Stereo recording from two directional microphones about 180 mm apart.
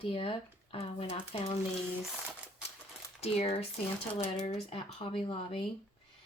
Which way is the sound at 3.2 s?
35° left (ahead or behind).